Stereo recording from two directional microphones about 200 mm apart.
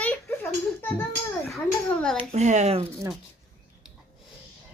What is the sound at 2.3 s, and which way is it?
Speech, 35° right (ahead or behind).